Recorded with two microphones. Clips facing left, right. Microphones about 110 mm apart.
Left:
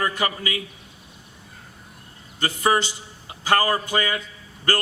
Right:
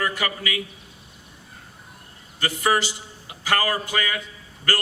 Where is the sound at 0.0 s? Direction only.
25° left (ahead or behind).